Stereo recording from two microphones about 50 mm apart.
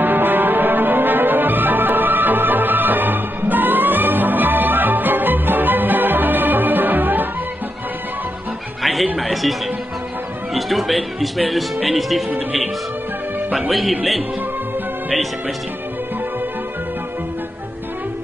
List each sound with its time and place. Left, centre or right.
0.0 s music: right
8.8 s music: centre
9.2 s speech: centre
13.5 s speech: centre